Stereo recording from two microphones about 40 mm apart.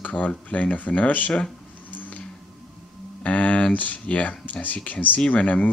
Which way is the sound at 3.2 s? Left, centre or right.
Left.